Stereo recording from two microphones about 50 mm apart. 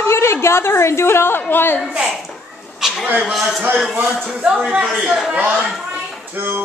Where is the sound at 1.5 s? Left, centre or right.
Left.